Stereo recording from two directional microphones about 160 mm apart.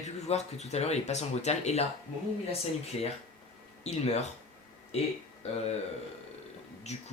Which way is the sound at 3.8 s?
45° left (ahead or behind).